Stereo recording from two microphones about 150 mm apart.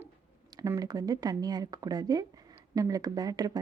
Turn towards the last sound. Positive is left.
turn(degrees=-25)  # may be behind; listen again after turning